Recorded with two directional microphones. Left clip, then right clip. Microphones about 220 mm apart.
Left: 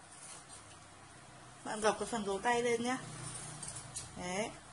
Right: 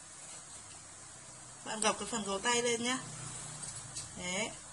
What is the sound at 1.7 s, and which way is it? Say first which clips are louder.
Speech: even; 25° left (ahead or behind).